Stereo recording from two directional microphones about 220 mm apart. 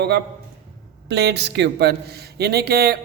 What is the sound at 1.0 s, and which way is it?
Speech, 50° right (ahead or behind).